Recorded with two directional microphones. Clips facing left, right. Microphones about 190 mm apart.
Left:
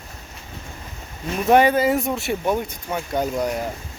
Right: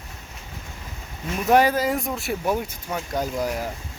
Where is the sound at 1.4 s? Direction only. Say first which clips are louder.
Left 3 dB; centre (ahead or behind).